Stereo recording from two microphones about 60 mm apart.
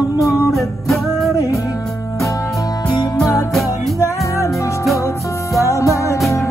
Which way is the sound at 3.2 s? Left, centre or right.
Left.